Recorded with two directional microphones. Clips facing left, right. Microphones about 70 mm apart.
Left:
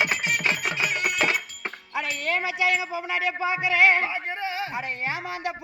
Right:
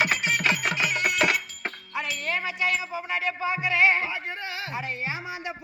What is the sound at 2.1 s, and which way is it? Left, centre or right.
Music, left.